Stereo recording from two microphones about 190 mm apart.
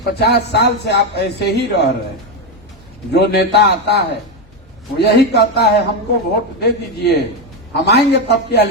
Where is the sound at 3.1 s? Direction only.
60° left (ahead or behind).